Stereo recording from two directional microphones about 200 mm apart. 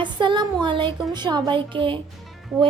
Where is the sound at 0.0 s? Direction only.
25° right (ahead or behind).